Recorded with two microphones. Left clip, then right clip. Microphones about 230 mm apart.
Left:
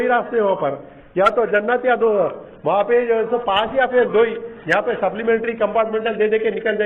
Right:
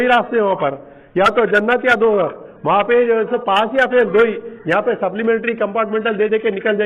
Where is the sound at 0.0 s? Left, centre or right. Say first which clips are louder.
Right 3 dB; right.